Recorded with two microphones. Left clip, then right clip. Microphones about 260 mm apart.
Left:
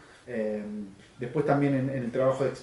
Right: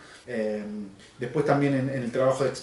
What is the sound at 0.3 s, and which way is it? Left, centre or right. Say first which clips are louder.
Speech: right 2 dB; centre.